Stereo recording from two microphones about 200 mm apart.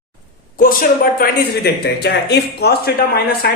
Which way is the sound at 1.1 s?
50° left (ahead or behind).